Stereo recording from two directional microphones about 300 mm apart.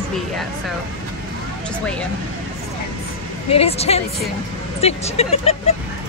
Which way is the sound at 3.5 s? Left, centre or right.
Centre.